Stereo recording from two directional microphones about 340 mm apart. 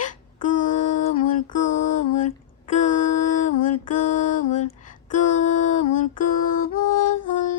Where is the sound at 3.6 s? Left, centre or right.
Left.